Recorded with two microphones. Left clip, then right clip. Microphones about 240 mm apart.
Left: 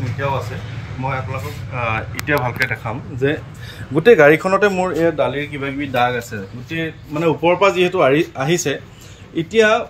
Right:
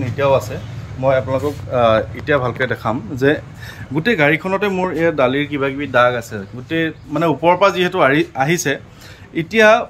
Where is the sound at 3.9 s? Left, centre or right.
Centre.